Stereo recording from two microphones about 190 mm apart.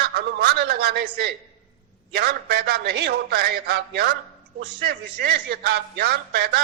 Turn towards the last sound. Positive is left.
turn(degrees=-55)  # may be behind; listen again after turning